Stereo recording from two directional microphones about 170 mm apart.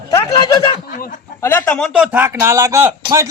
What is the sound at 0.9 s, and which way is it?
Speech, 50° left (ahead or behind).